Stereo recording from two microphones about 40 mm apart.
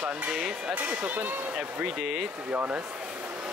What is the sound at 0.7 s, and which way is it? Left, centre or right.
Speech, right.